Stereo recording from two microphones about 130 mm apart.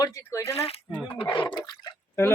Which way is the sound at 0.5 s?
50° left (ahead or behind).